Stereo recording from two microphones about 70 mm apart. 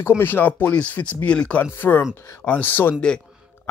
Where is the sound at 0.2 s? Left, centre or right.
Left.